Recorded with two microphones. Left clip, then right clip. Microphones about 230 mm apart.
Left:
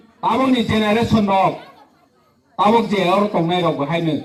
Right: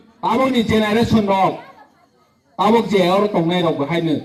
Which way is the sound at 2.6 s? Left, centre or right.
Right.